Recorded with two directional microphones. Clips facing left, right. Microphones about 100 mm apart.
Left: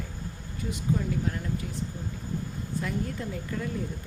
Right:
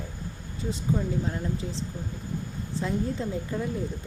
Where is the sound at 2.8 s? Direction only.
25° right (ahead or behind).